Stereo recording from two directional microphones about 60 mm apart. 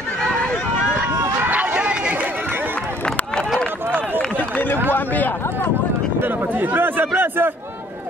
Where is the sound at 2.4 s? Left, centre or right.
Right.